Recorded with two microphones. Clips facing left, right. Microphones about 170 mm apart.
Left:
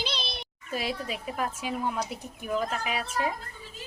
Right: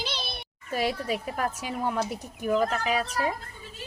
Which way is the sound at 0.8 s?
45° right (ahead or behind).